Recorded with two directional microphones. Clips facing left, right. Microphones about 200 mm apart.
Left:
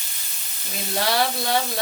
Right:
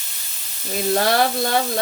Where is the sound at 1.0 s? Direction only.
50° right (ahead or behind).